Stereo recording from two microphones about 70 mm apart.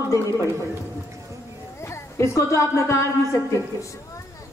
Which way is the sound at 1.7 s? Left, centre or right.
Left.